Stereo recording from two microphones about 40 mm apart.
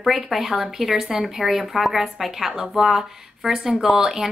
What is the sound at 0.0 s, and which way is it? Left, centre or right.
Speech, centre.